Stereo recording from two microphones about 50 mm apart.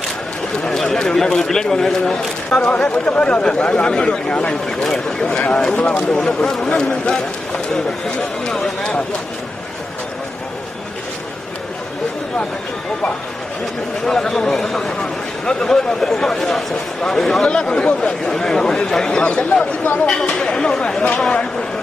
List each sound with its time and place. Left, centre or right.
0.6 s speech: centre
2.5 s speech: left; by 5.3 s centre
5.3 s speech: left
14.0 s speech: centre
20.1 s speech: centre